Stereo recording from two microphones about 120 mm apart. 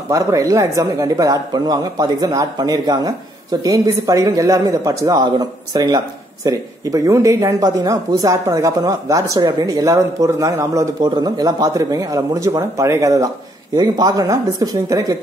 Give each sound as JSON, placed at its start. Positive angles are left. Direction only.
{"t": 0.1, "sound": "a man's voice", "side_deg": -25}